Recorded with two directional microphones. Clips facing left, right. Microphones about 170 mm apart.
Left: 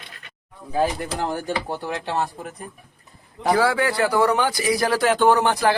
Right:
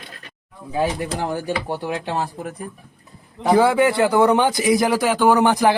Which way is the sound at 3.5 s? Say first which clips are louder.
Right 4 dB; 20° right (ahead or behind).